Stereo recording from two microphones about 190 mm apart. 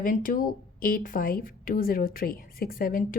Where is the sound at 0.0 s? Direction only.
45° left (ahead or behind).